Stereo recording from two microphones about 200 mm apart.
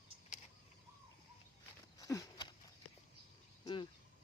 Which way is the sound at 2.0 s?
15° left (ahead or behind).